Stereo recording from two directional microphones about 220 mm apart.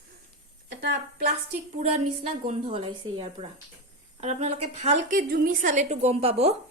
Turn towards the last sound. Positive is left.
turn(degrees=-30)  # may be behind; listen again after turning